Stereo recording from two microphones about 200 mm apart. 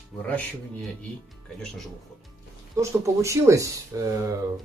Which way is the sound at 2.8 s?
15° right (ahead or behind).